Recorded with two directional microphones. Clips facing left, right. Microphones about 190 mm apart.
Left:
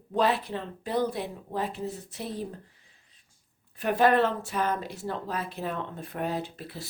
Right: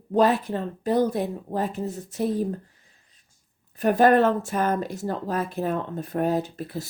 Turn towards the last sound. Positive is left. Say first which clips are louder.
# right 7 dB
turn(degrees=-45)  # may be behind; listen again after turning